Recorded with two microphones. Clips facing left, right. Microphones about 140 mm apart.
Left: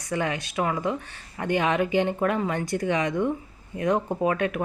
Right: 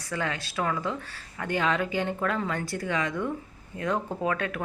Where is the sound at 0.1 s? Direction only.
20° left (ahead or behind).